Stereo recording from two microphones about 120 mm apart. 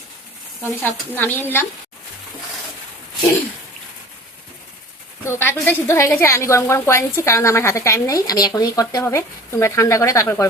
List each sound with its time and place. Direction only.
0.8 s speech: 15° left (ahead or behind)
5.2 s a woman's voice: 20° left (ahead or behind)